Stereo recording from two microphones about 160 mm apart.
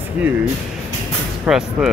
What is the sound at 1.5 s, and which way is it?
Speech, 5° right (ahead or behind).